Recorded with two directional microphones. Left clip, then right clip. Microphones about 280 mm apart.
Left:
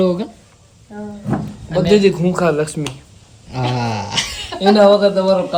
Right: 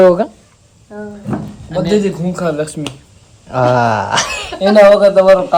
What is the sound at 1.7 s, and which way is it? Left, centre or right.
Speech, centre.